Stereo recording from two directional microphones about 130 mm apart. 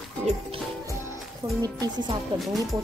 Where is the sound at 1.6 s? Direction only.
35° right (ahead or behind).